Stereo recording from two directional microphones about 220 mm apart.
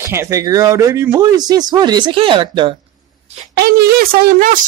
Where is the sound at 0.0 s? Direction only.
10° right (ahead or behind).